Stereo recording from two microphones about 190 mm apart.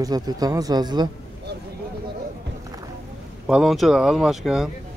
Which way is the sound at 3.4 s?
5° right (ahead or behind).